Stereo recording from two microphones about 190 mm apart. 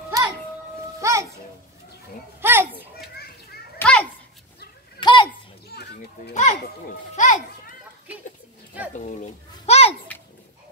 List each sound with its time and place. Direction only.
0.1 s music: 20° right (ahead or behind)
2.4 s children playing: 10° right (ahead or behind)
2.7 s children playing: 55° left (ahead or behind)
3.7 s children playing: 5° left (ahead or behind)
5.0 s children playing: 25° left (ahead or behind)
5.7 s children playing: 60° left (ahead or behind)
6.3 s children playing: 35° left (ahead or behind)
8.9 s children playing: 40° left (ahead or behind)